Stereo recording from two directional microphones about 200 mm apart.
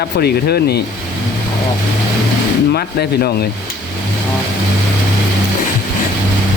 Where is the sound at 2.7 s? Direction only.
50° left (ahead or behind).